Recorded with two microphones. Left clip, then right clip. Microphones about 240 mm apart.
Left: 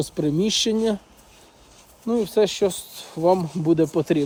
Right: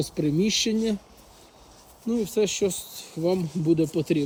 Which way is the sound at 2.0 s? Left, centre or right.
Left.